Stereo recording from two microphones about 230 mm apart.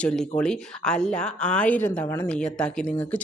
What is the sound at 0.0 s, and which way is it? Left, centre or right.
Speech, centre.